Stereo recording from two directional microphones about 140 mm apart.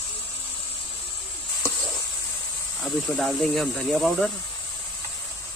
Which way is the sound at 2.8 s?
Centre (ahead or behind).